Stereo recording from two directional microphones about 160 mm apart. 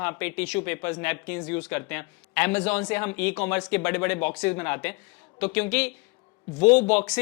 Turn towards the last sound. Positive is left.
turn(degrees=10)  # may be behind; listen again after turning